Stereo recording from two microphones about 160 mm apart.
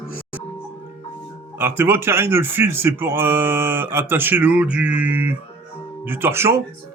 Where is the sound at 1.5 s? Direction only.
15° right (ahead or behind).